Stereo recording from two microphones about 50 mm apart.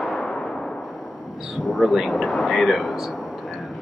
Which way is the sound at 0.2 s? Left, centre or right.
Centre.